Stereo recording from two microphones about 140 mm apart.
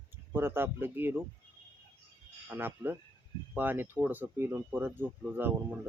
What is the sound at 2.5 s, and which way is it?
Speech, 15° right (ahead or behind).